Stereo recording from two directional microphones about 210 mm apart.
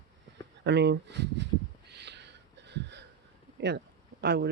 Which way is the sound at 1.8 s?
55° right (ahead or behind).